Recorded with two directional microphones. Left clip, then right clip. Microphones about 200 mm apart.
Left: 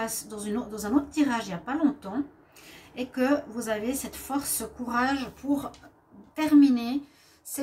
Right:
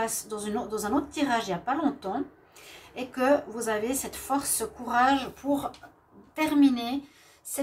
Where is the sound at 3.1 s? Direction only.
35° right (ahead or behind).